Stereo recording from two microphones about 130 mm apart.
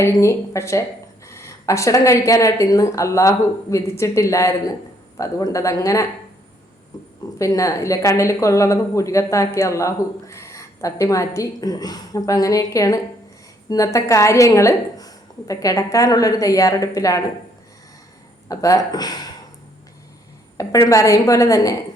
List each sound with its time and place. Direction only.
0.0 s a woman's voice: 20° left (ahead or behind)
6.9 s a sound: 30° left (ahead or behind)
7.3 s a woman's voice: 25° left (ahead or behind)
18.4 s a woman's voice: 25° left (ahead or behind)
20.6 s a woman's voice: 25° left (ahead or behind)